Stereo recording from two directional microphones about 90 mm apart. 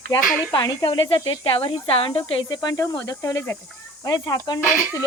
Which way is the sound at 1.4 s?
90° left.